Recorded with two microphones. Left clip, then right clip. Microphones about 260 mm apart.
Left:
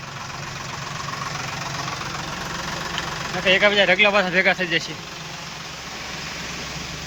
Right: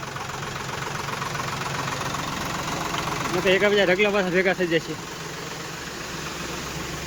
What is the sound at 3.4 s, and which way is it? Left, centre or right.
Speech, centre.